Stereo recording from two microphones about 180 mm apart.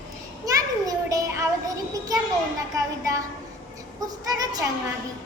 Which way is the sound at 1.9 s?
20° right (ahead or behind).